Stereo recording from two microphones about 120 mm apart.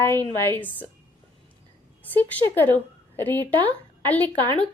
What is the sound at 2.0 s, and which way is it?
A woman's voice, 15° left (ahead or behind).